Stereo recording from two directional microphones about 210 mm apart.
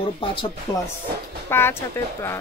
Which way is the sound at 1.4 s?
10° left (ahead or behind).